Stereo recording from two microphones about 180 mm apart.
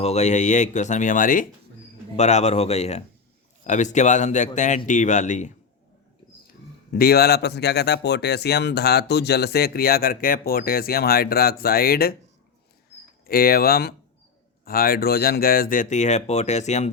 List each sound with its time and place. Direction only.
0.0 s speech: 40° left (ahead or behind)
6.9 s speech: 60° left (ahead or behind)
13.2 s speech: 55° left (ahead or behind); by 16.9 s 40° left (ahead or behind)